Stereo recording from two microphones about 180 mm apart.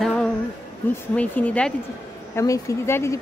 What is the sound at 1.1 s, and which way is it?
Speech, 10° left (ahead or behind).